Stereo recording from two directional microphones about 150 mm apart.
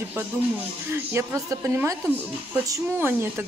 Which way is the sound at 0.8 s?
20° right (ahead or behind).